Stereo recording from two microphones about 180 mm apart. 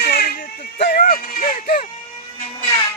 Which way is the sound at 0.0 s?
60° left (ahead or behind).